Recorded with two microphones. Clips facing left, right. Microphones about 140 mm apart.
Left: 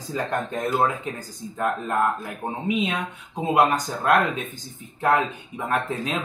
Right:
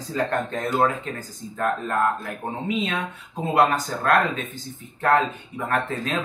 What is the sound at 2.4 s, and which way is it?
Speech, 15° left (ahead or behind).